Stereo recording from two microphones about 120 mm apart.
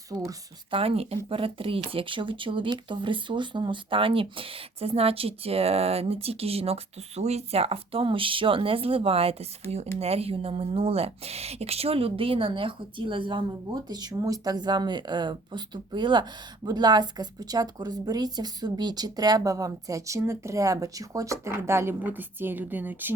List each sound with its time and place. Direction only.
0.1 s a woman's voice: 30° right (ahead or behind)
0.7 s a woman's voice: 50° right (ahead or behind); by 23.1 s 15° right (ahead or behind)